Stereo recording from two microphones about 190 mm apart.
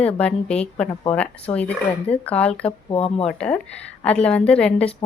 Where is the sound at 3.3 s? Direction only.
5° left (ahead or behind).